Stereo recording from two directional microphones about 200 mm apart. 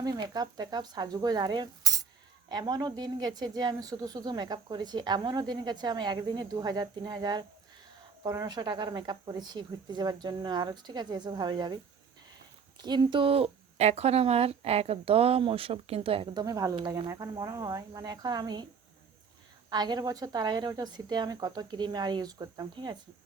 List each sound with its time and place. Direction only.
0.0 s speech: 20° right (ahead or behind)
12.8 s speech: 20° right (ahead or behind)
19.7 s speech: 20° right (ahead or behind)